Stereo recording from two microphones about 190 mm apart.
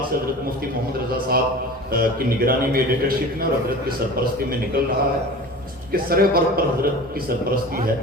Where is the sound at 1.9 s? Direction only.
50° right (ahead or behind).